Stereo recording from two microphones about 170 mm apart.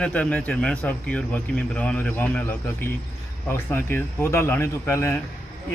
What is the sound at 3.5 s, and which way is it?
Speech, 15° left (ahead or behind).